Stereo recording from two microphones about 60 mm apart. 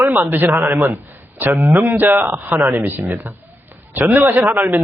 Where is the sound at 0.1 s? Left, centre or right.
Right.